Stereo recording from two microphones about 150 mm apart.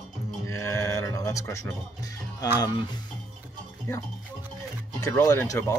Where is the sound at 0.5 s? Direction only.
15° left (ahead or behind).